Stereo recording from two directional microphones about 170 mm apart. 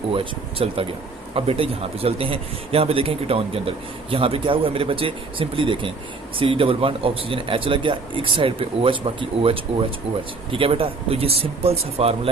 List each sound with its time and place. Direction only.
0.6 s speech: 35° right (ahead or behind)